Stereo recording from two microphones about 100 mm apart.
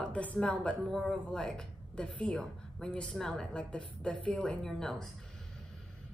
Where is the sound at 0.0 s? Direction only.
15° left (ahead or behind).